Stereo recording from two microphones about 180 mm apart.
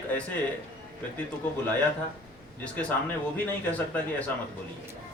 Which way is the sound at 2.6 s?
5° left (ahead or behind).